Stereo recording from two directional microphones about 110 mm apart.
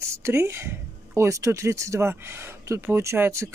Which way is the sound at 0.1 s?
25° right (ahead or behind).